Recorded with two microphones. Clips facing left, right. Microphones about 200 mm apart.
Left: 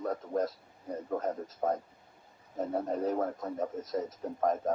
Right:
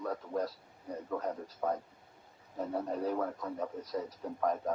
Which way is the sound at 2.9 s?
45° left (ahead or behind).